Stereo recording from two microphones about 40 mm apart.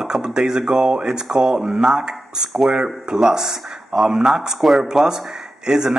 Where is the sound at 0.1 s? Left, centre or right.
Centre.